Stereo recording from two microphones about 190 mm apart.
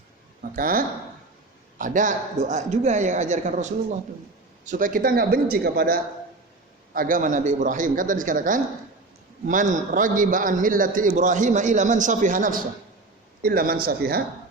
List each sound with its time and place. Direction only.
0.5 s a man's voice: 50° right (ahead or behind)